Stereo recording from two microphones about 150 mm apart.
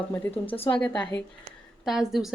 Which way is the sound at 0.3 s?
40° left (ahead or behind).